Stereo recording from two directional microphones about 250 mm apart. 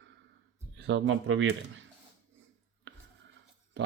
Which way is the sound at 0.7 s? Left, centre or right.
Right.